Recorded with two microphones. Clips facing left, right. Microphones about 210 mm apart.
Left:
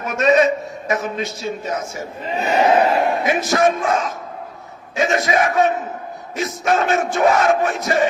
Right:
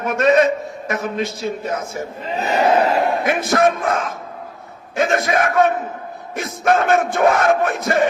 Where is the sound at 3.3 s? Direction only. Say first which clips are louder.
Right 1 dB; 55° right (ahead or behind).